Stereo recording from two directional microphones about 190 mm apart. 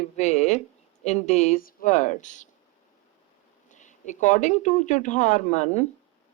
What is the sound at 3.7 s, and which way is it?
Speech, 40° left (ahead or behind).